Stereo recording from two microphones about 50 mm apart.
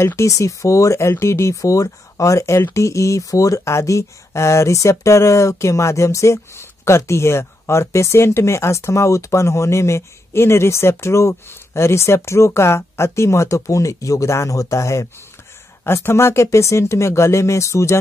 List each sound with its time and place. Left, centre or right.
0.0 s speech: left
15.8 s speech: left